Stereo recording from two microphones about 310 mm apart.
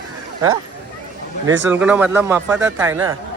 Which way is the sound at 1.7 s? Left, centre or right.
Centre.